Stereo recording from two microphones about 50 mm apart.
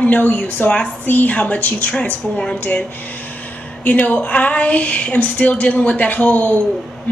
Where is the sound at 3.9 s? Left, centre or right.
Left.